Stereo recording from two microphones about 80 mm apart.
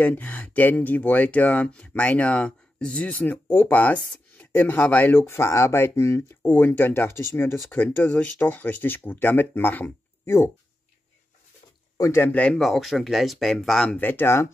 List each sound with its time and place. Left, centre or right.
0.0 s speech: left
6.4 s speech: left
12.0 s speech: left
12.3 s speech: centre
12.5 s speech: centre
13.9 s speech: left